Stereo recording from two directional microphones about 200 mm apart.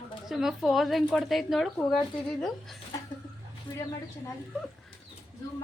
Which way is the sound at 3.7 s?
25° left (ahead or behind).